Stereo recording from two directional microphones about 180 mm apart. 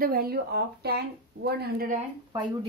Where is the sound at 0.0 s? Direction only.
55° right (ahead or behind).